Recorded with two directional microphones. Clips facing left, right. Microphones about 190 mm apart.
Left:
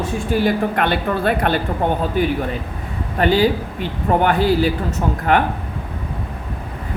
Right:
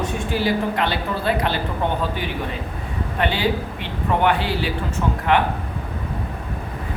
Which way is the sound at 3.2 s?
40° left (ahead or behind).